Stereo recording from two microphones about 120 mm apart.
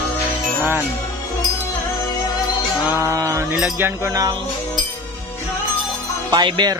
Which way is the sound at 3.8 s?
25° right (ahead or behind).